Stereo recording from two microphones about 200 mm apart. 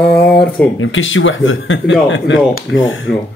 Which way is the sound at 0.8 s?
75° left (ahead or behind).